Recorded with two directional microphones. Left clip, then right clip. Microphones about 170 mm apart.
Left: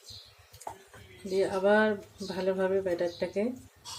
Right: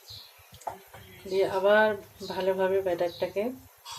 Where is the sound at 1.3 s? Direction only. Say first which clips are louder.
Right 3 dB; 30° left (ahead or behind).